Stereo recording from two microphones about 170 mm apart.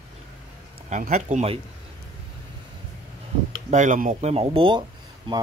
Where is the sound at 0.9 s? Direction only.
50° right (ahead or behind).